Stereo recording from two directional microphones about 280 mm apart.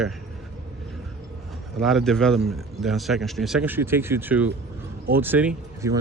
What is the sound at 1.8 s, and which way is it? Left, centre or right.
A man's voice, centre.